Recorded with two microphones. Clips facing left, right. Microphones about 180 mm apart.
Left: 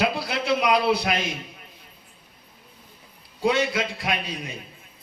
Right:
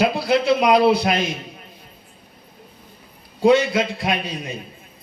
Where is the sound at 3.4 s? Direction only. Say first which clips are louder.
Right 7 dB; 25° right (ahead or behind).